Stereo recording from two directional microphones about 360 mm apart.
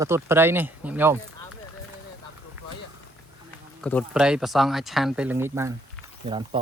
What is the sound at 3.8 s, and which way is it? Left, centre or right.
Speech, centre.